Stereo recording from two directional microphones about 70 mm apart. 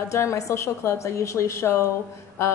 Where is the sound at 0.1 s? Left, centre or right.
Left.